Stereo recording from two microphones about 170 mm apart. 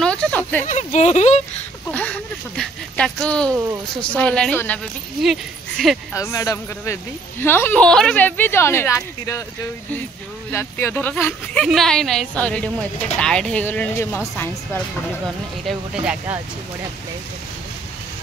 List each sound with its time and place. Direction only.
0.0 s a sound: 5° left (ahead or behind)
0.7 s speech: 45° left (ahead or behind)
1.9 s speech: 5° left (ahead or behind)
6.1 s speech: 20° left (ahead or behind)
10.5 s speech: 15° left (ahead or behind)
11.6 s a woman's voice: centre (ahead or behind)
15.6 s a woman's voice: 5° right (ahead or behind)